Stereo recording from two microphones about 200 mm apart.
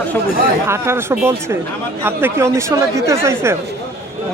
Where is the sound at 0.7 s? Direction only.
10° right (ahead or behind).